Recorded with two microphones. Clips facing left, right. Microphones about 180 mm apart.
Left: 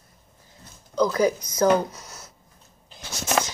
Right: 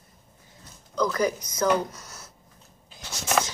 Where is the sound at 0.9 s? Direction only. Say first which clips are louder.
Left 4 dB; 25° left (ahead or behind).